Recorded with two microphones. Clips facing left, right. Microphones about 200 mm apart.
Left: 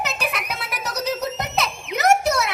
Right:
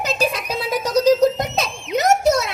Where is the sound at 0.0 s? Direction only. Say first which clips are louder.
Right 6 dB; 65° left (ahead or behind).